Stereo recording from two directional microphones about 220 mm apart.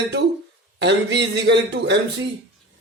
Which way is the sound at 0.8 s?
50° right (ahead or behind).